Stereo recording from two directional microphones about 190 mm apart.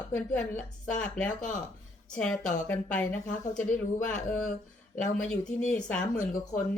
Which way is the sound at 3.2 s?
45° left (ahead or behind).